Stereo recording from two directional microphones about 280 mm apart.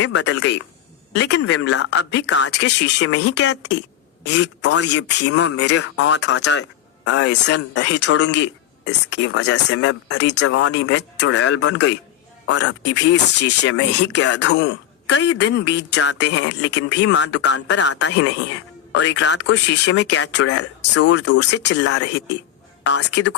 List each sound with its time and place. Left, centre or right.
0.0 s speech: left
8.3 s a sound: left
9.0 s speech: left